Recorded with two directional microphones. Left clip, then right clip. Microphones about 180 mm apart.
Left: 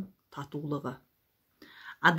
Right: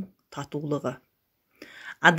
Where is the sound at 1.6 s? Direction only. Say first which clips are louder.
Right 5 dB; 25° right (ahead or behind).